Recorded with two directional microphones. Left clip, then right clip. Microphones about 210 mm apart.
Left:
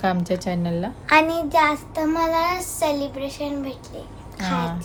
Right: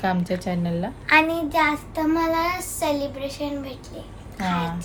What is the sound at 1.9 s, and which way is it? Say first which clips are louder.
Child singing: left 1 dB; 20° left (ahead or behind).